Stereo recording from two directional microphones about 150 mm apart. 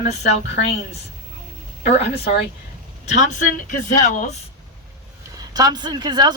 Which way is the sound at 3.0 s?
55° left (ahead or behind).